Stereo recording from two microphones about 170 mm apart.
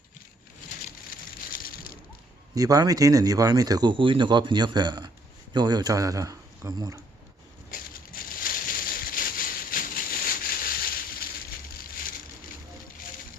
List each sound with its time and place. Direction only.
1.5 s crushing: 60° left (ahead or behind)
2.6 s speech: 20° right (ahead or behind)
7.7 s a sound: 55° left (ahead or behind)